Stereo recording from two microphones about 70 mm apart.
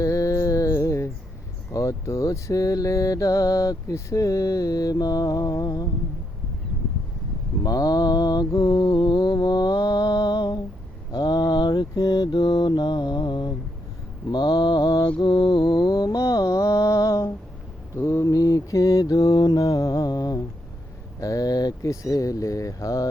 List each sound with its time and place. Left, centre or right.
0.0 s mantra: left
7.6 s mantra: left
11.1 s mantra: left
16.2 s mantra: left
17.9 s mantra: left
18.3 s mantra: left
19.6 s mantra: left
21.2 s a sound: left
22.0 s a sound: left